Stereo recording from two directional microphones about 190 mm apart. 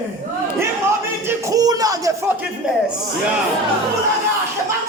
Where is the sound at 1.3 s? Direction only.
20° right (ahead or behind).